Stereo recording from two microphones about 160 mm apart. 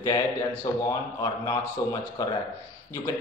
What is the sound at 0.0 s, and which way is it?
A man's voice, 20° left (ahead or behind).